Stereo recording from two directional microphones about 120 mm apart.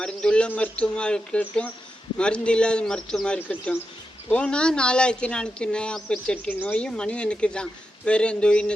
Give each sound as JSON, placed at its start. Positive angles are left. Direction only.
{"t": 0.0, "sound": "speech", "side_deg": 5}